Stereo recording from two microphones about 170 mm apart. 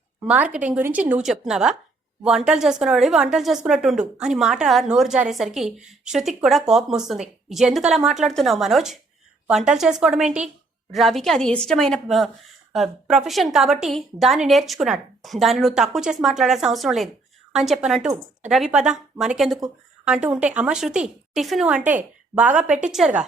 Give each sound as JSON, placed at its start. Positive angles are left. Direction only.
{"t": 0.3, "sound": "a woman's voice", "side_deg": -5}